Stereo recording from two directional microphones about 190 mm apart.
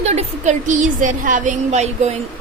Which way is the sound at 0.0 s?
35° right (ahead or behind).